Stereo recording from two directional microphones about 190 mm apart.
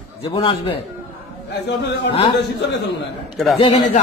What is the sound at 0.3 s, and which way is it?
Speech, 30° left (ahead or behind).